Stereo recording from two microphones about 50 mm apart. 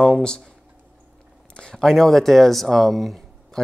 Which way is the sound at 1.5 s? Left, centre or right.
Centre.